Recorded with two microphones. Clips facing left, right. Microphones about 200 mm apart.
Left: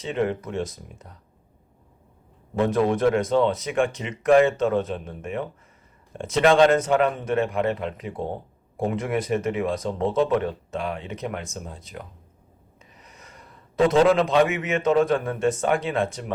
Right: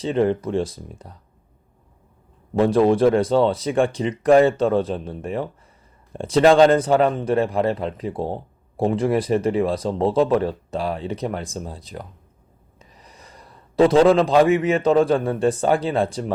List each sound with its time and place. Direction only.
0.0 s a man's voice: 35° right (ahead or behind)
2.6 s a man's voice: 30° right (ahead or behind)